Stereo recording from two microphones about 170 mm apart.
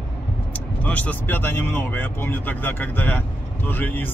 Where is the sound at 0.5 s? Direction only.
10° left (ahead or behind).